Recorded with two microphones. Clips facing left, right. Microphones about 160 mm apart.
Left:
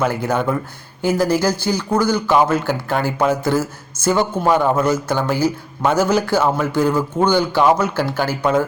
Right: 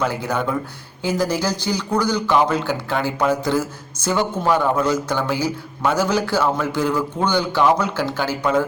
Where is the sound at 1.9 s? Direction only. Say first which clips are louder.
Left 2 dB; 10° left (ahead or behind).